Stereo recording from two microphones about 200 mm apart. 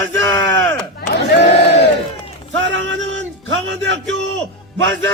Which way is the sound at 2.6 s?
65° right (ahead or behind).